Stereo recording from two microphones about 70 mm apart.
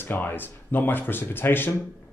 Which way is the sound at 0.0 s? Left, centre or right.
Left.